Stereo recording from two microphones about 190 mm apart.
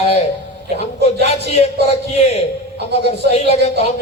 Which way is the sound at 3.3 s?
35° left (ahead or behind).